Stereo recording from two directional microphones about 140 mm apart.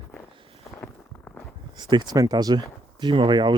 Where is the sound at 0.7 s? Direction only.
15° left (ahead or behind).